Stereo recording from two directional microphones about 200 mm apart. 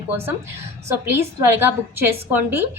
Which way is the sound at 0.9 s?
10° right (ahead or behind).